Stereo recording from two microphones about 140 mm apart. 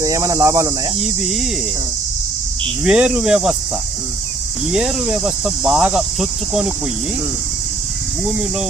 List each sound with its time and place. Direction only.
0.0 s speech: 25° right (ahead or behind)
0.9 s speech: centre (ahead or behind)
2.8 s speech: 5° right (ahead or behind)
4.7 s speech: 5° right (ahead or behind)
8.3 s speech: 10° right (ahead or behind)